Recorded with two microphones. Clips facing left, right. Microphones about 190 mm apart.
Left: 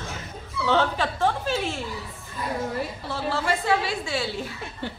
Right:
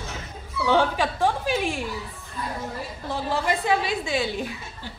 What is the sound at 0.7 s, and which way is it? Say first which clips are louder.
A woman's voice: right 2 dB; 10° right (ahead or behind).